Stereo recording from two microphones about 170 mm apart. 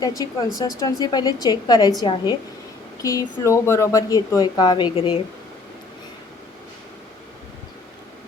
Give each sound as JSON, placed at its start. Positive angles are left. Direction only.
{"t": 0.0, "sound": "speech", "side_deg": 20}